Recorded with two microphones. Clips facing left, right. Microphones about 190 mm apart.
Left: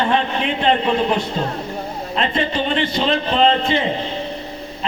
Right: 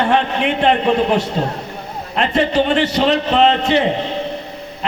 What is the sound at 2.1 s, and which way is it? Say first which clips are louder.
A man's voice: right 5 dB; 75° right (ahead or behind).